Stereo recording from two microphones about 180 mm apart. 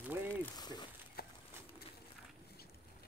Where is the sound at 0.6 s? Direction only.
20° left (ahead or behind).